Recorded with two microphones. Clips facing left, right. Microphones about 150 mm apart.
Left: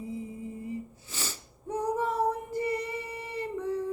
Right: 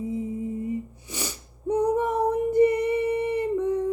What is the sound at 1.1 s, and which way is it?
Female singing, 15° right (ahead or behind).